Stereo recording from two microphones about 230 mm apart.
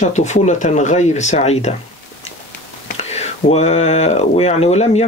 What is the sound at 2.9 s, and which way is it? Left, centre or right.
Speech, left.